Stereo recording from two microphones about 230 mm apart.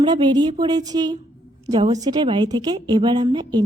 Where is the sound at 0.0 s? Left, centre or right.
Centre.